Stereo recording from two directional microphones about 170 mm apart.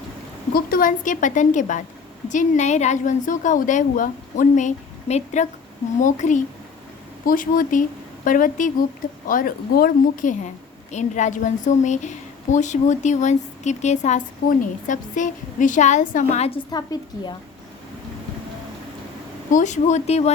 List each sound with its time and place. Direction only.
0.5 s a woman's voice: 55° left (ahead or behind)
16.7 s a woman's voice: 25° left (ahead or behind)
19.5 s a woman's voice: 45° left (ahead or behind)